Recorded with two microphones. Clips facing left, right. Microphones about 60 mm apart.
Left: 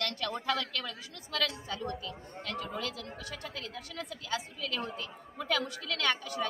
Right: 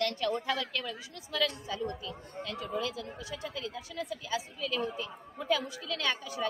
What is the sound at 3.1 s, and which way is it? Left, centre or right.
Speech, left.